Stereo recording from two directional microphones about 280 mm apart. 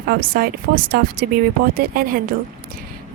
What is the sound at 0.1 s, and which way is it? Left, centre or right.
Speech, right.